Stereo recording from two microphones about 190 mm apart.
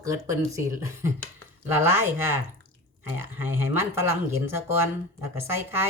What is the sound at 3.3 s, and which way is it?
Speech, 10° right (ahead or behind).